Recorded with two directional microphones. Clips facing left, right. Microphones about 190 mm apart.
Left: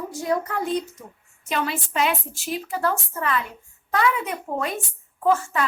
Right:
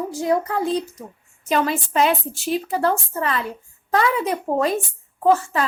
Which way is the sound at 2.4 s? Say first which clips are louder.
Right 4 dB; 30° right (ahead or behind).